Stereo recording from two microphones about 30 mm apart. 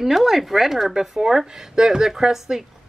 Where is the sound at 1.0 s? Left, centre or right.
Centre.